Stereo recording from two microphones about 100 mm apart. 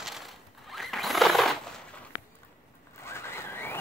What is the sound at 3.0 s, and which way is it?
Vehicle, 25° left (ahead or behind).